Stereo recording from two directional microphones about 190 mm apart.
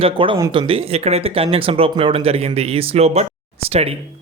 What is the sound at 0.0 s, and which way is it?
Speech, 25° right (ahead or behind).